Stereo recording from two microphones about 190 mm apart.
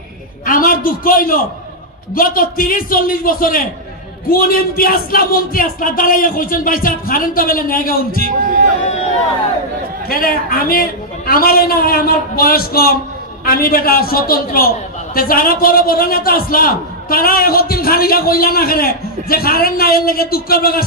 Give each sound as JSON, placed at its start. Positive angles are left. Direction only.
{"t": 0.5, "sound": "a man's voice", "side_deg": 45}
{"t": 8.4, "sound": "speech", "side_deg": -45}
{"t": 10.0, "sound": "a man's voice", "side_deg": 50}